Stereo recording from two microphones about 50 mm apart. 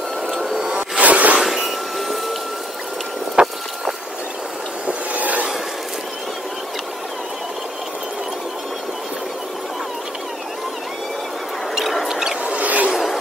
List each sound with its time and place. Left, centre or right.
0.3 s vehicle: centre
0.7 s vehicle: centre
1.0 s chink: right
1.4 s vehicle: centre
3.4 s vehicle: right
4.8 s vehicle: right
11.7 s squeal: centre
12.1 s rodents: centre
12.4 s rodents: right
12.9 s a sound: centre